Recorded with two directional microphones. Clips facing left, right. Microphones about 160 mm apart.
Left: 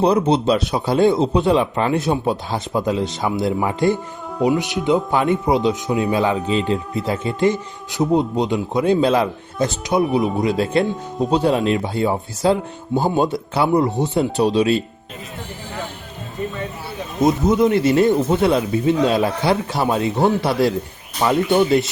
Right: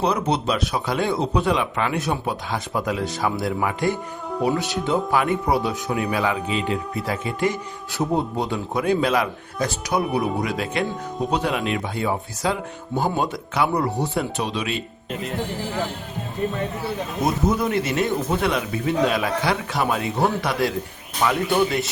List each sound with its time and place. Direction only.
0.0 s speech: 30° left (ahead or behind)
4.4 s speech: 15° left (ahead or behind); by 14.8 s 35° left (ahead or behind)
17.2 s speech: 25° left (ahead or behind)